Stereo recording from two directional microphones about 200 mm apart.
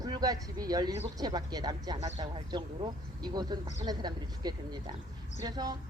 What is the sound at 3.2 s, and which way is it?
A woman's voice, 20° right (ahead or behind).